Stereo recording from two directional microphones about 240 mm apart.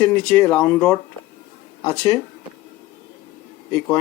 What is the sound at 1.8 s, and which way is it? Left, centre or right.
Speech, centre.